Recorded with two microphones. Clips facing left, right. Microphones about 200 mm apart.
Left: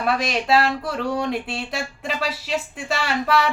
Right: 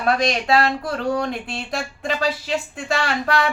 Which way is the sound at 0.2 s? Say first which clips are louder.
Right 1 dB; 5° left (ahead or behind).